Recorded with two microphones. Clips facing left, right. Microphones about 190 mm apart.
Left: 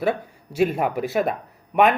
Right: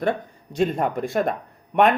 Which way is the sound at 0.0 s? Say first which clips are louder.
Left 1 dB; 5° left (ahead or behind).